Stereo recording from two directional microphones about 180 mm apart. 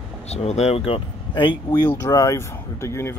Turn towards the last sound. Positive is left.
turn(degrees=15)  # may be behind; listen again after turning